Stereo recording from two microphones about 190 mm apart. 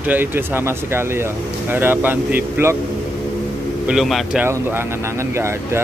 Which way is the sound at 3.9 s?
Centre (ahead or behind).